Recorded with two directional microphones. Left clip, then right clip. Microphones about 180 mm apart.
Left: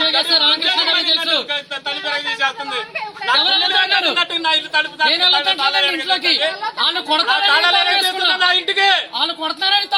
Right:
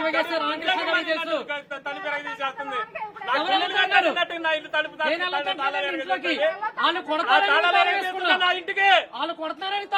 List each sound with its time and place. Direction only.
0.1 s a man's voice: 10° right (ahead or behind)
1.0 s a sound: 10° right (ahead or behind)
3.3 s a sound: 10° right (ahead or behind)
4.1 s speech: 5° left (ahead or behind)
5.0 s a man's voice: 10° right (ahead or behind)
7.4 s speech: centre (ahead or behind)
9.1 s a man's voice: 10° right (ahead or behind)